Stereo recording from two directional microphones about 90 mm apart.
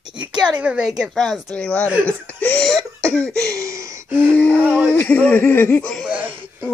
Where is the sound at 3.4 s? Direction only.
35° right (ahead or behind).